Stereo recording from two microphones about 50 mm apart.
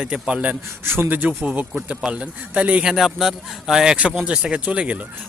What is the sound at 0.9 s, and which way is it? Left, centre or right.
Speech, right.